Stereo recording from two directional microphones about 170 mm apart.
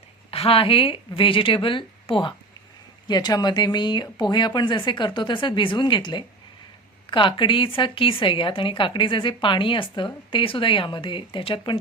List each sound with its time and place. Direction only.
0.3 s a woman's voice: 35° left (ahead or behind)